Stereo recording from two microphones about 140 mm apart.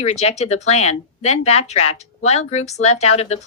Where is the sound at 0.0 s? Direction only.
50° left (ahead or behind).